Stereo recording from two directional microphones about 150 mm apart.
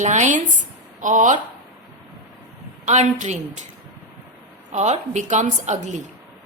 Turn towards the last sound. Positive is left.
turn(degrees=-55)  # may be behind; listen again after turning